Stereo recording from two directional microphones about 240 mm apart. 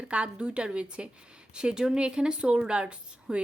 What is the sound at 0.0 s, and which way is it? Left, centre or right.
A woman's voice, centre.